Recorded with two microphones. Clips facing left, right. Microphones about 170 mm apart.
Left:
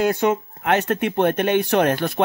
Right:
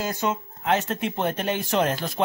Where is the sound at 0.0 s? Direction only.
65° left (ahead or behind).